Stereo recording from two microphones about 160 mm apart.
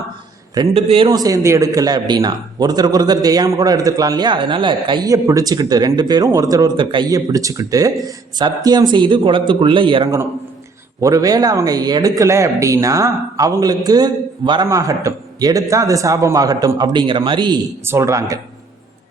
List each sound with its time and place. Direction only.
0.5 s a man's voice: 35° right (ahead or behind)
1.1 s speech: 20° right (ahead or behind)
5.0 s speech: 20° right (ahead or behind)
11.0 s speech: 20° right (ahead or behind)
17.8 s speech: 15° right (ahead or behind)